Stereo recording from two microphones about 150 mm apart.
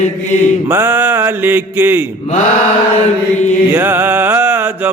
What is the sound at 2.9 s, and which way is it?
Mantra, 50° left (ahead or behind).